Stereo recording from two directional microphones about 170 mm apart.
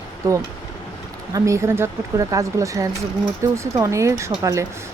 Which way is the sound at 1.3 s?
15° right (ahead or behind).